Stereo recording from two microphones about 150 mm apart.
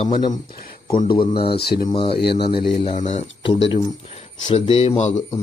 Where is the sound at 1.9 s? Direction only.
35° left (ahead or behind).